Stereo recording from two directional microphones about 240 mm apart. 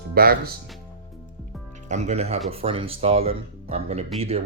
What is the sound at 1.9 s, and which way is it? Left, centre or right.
Speech, right.